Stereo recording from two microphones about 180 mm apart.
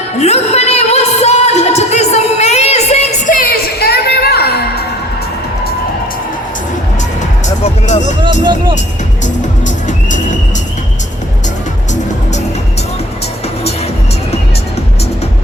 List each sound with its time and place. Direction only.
0.2 s music: 35° left (ahead or behind); by 4.6 s 60° left (ahead or behind)
7.4 s music: 40° left (ahead or behind)
9.2 s music: 45° left (ahead or behind)